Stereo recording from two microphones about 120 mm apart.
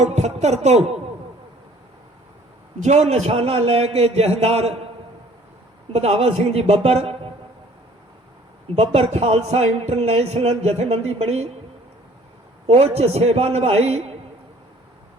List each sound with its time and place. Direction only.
0.0 s speech: 70° right (ahead or behind)
2.8 s a man's voice: 70° right (ahead or behind)
5.9 s a man's voice: 60° right (ahead or behind)
8.7 s a man's voice: 55° right (ahead or behind)
12.6 s a man's voice: 60° right (ahead or behind)